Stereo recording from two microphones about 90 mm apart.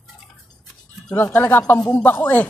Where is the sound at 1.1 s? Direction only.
25° left (ahead or behind).